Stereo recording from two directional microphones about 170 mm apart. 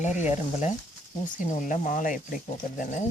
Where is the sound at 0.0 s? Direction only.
45° left (ahead or behind).